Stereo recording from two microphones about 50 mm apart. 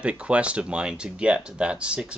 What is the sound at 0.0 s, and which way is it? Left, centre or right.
Speech, right.